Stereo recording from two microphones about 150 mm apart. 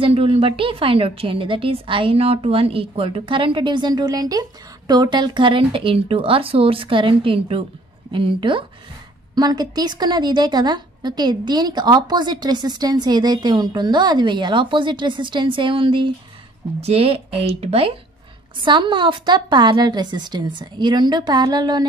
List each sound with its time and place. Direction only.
0.0 s a woman's voice: 40° right (ahead or behind)